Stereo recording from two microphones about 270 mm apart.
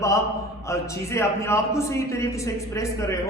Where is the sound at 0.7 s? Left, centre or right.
Centre.